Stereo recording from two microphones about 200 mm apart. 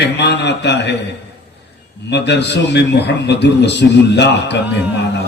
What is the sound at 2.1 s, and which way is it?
A man's voice, 60° left (ahead or behind).